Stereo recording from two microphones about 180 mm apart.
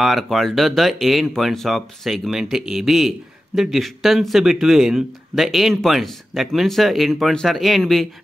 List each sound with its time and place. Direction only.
0.0 s speech: centre (ahead or behind)